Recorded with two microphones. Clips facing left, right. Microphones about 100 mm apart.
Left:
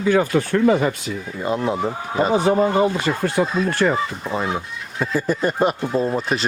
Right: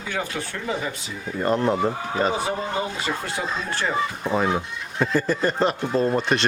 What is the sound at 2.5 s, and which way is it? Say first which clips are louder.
Speech: left 10 dB; 55° left (ahead or behind).